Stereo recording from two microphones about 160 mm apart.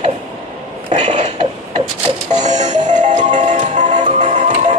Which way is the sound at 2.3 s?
45° right (ahead or behind).